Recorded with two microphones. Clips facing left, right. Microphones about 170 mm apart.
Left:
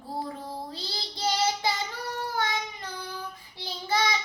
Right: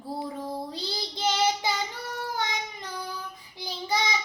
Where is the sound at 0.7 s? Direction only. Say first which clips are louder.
Right 4 dB; 20° right (ahead or behind).